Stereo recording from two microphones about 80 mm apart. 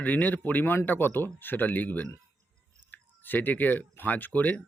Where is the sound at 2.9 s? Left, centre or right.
Left.